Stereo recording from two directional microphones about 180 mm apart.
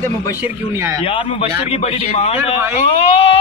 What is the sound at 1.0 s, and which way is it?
A man's voice, 30° left (ahead or behind).